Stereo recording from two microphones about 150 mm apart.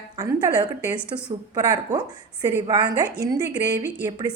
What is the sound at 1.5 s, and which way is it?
A woman's voice, 25° right (ahead or behind).